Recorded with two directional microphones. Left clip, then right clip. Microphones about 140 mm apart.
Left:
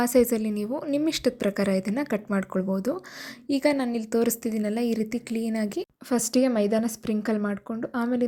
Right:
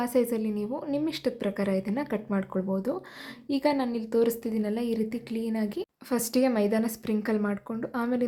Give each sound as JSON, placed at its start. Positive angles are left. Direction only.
{"t": 0.0, "sound": "a woman's voice", "side_deg": 30}